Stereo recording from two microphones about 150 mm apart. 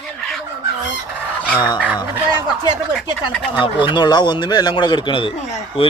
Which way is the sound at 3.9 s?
30° left (ahead or behind).